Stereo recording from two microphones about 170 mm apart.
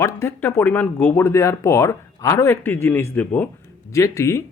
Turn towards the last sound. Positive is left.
turn(degrees=15)  # may be behind; listen again after turning